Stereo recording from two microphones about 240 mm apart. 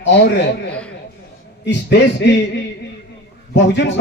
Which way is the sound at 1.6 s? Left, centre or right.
Left.